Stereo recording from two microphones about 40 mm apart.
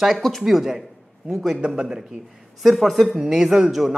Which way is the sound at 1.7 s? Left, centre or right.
Centre.